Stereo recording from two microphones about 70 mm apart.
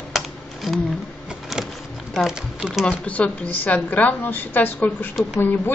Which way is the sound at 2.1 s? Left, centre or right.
Centre.